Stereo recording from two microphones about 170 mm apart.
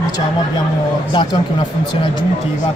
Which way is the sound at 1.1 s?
30° left (ahead or behind).